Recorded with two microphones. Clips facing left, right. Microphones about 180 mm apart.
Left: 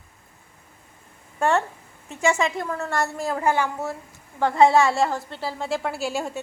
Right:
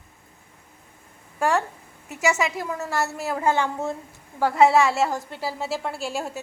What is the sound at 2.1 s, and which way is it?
A woman's voice, 5° right (ahead or behind).